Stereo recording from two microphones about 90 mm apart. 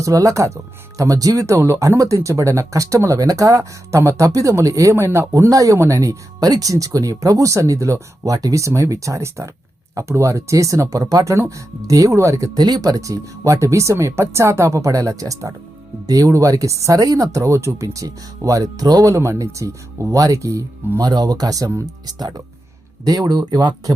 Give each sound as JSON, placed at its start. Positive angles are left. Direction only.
{"t": 0.0, "sound": "speech", "side_deg": -40}
{"t": 21.1, "sound": "speech", "side_deg": -50}
{"t": 22.0, "sound": "speech", "side_deg": -50}